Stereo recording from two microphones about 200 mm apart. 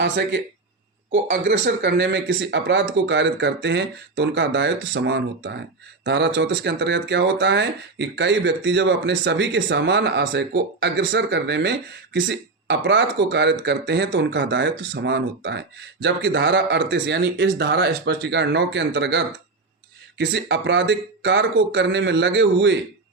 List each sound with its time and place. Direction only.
1.1 s speech: 60° right (ahead or behind)